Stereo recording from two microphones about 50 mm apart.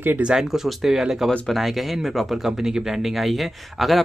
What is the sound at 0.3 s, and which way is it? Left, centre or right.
Speech, centre.